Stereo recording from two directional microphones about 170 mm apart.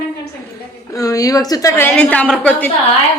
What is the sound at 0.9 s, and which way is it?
A woman's voice, 20° left (ahead or behind).